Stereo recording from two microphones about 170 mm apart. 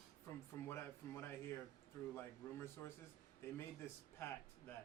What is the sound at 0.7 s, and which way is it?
A man's voice, 15° left (ahead or behind).